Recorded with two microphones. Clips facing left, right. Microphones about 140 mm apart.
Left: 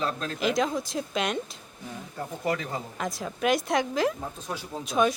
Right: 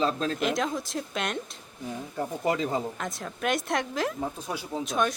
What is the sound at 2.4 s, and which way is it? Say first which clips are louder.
Speech: right 3 dB; 25° right (ahead or behind).